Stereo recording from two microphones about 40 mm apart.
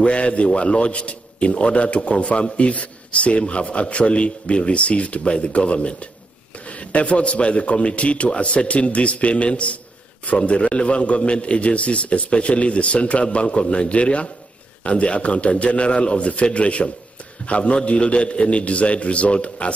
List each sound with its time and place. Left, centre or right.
0.0 s a man's voice: left